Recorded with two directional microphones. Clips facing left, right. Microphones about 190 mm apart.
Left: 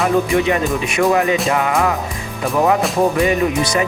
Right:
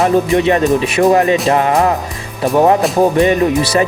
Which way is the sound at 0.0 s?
30° right (ahead or behind).